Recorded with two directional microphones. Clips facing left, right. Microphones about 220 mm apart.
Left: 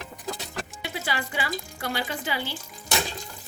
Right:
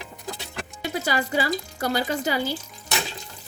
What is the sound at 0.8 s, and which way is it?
Speech, 40° right (ahead or behind).